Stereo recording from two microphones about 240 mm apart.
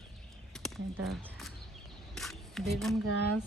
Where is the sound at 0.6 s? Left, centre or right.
Centre.